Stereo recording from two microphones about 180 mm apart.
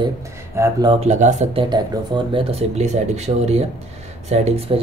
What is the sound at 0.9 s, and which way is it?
Speech, 40° right (ahead or behind).